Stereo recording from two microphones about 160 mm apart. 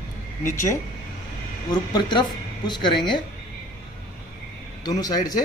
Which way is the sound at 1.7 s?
25° left (ahead or behind).